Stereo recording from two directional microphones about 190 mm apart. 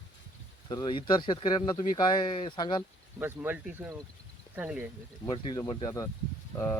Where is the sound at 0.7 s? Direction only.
25° left (ahead or behind).